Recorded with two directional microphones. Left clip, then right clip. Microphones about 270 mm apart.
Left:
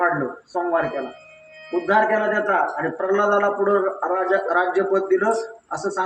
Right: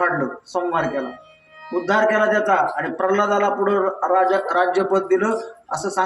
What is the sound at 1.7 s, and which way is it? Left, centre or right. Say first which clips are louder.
Speech: right 1 dB; centre.